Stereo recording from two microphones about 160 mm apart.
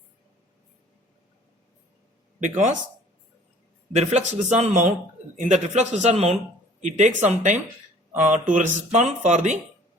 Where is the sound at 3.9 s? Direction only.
40° right (ahead or behind).